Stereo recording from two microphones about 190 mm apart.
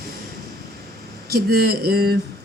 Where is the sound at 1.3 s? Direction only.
55° right (ahead or behind).